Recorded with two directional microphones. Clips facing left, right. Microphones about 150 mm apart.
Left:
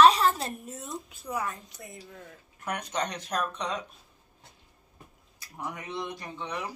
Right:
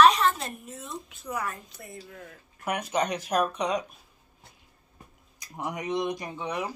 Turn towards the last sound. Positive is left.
turn(degrees=-10)  # may be behind; listen again after turning